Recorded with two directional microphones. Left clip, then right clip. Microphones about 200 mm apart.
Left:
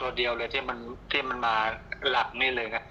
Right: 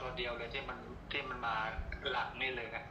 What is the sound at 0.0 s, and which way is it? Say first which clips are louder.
A man's voice: left 11 dB; 60° left (ahead or behind).